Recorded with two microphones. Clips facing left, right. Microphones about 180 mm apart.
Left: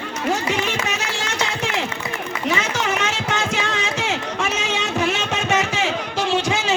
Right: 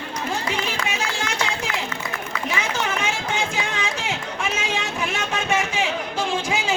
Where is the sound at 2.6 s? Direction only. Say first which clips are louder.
Left 2 dB; 85° left.